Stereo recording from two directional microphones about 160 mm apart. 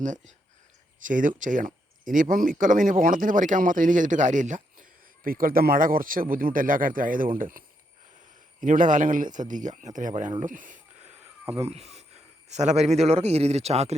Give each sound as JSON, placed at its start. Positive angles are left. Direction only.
{"t": 1.0, "sound": "speech", "side_deg": -55}
{"t": 8.6, "sound": "speech", "side_deg": -55}
{"t": 10.4, "sound": "a sound", "side_deg": -55}
{"t": 11.5, "sound": "a man's voice", "side_deg": -40}